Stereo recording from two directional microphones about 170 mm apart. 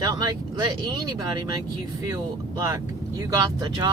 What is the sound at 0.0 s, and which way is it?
Speech, 20° right (ahead or behind).